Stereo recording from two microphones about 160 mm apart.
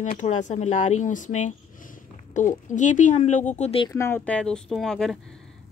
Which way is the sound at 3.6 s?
35° left (ahead or behind).